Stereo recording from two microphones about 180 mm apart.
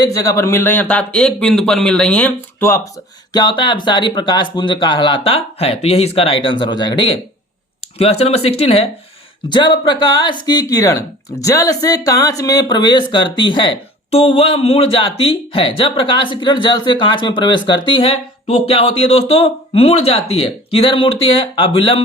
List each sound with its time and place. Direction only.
0.0 s speech: 20° left (ahead or behind)
3.3 s speech: 25° left (ahead or behind)
8.2 s speech: 35° left (ahead or behind)